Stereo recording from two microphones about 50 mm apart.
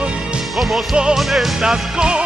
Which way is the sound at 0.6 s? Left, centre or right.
Centre.